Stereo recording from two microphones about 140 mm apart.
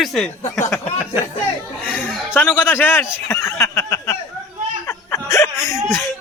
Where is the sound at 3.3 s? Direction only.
20° left (ahead or behind).